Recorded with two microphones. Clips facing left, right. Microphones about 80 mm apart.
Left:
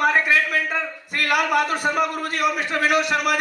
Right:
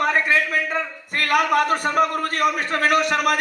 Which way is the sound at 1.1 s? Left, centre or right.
Right.